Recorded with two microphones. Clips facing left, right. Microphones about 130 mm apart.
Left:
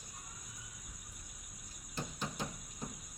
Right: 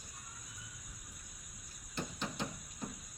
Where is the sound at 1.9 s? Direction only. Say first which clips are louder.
Right 1 dB; 10° left (ahead or behind).